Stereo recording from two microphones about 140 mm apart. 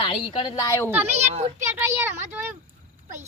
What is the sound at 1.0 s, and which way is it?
Speech, 50° right (ahead or behind).